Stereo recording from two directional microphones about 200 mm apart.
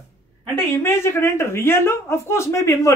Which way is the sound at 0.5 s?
10° left (ahead or behind).